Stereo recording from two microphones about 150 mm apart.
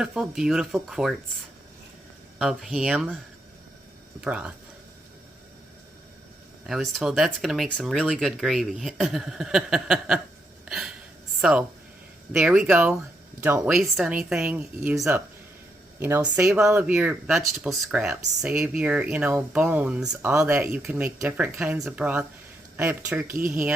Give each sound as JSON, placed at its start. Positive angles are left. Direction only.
{"t": 0.0, "sound": "speech", "side_deg": -5}
{"t": 2.4, "sound": "speech", "side_deg": 0}
{"t": 4.2, "sound": "speech", "side_deg": -10}
{"t": 6.7, "sound": "speech", "side_deg": 0}
{"t": 10.7, "sound": "gasp", "side_deg": 0}
{"t": 11.3, "sound": "speech", "side_deg": -5}
{"t": 16.0, "sound": "speech", "side_deg": -15}